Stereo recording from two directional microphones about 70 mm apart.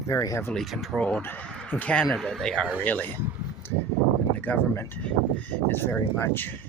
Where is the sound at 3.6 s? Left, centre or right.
Left.